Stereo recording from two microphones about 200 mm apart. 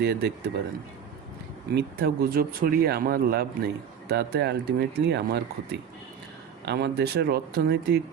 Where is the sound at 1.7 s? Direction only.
55° right (ahead or behind).